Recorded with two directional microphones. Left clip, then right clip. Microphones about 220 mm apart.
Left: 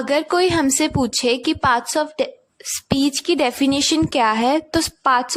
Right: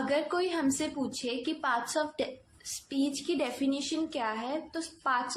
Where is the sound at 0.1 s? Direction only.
50° left (ahead or behind).